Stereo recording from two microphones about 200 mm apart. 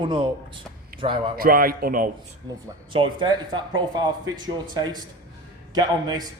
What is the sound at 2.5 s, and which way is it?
Speech, 20° right (ahead or behind).